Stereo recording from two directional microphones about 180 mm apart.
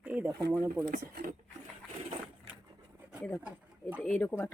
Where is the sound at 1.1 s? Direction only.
50° right (ahead or behind).